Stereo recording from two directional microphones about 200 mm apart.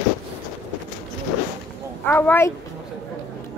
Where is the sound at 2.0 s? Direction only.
10° left (ahead or behind).